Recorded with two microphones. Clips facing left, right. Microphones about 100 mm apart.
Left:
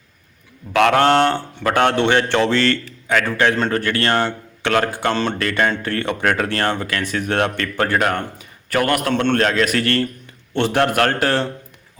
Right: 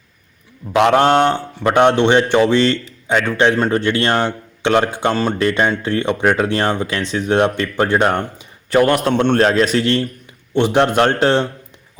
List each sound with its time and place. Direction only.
0.7 s a man's voice: 20° right (ahead or behind)